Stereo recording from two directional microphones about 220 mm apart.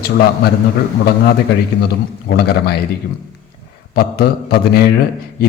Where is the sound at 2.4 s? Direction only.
45° left (ahead or behind).